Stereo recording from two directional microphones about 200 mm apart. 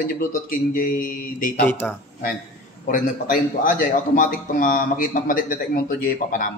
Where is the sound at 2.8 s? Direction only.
40° left (ahead or behind).